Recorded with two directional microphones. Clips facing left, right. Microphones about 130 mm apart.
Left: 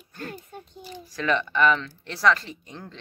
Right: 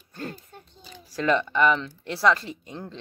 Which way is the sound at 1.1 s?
30° right (ahead or behind).